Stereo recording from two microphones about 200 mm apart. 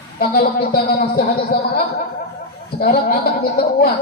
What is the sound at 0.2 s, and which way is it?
A man's voice, 50° left (ahead or behind).